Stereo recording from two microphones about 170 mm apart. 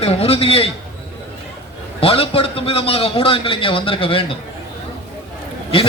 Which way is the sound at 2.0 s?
35° left (ahead or behind).